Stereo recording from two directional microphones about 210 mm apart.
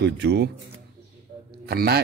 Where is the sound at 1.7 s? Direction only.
50° right (ahead or behind).